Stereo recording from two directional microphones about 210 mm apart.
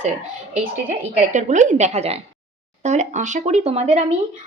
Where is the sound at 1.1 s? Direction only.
35° right (ahead or behind).